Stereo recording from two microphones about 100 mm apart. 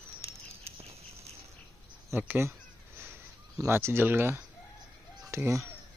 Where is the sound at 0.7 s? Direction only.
90° right.